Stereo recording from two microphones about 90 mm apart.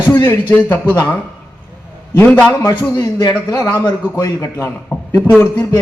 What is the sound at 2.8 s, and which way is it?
A man's voice, 45° left (ahead or behind).